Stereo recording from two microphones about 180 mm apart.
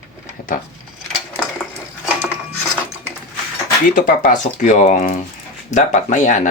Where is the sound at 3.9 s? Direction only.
50° left (ahead or behind).